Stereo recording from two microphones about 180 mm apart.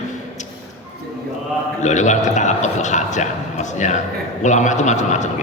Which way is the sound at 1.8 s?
40° left (ahead or behind).